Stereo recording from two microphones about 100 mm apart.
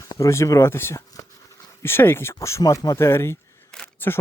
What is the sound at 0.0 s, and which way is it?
Speech, 30° left (ahead or behind).